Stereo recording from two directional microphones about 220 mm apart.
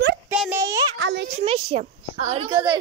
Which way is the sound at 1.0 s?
55° right (ahead or behind).